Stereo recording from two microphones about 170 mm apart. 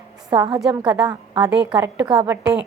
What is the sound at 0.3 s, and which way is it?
Speech, 30° right (ahead or behind).